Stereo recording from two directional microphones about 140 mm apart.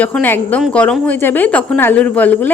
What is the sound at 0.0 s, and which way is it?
Speech, 10° left (ahead or behind).